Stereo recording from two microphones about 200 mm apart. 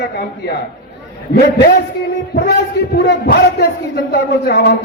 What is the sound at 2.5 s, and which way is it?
A man's voice, 55° left (ahead or behind).